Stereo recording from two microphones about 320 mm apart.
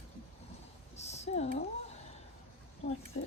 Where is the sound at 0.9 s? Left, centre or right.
Centre.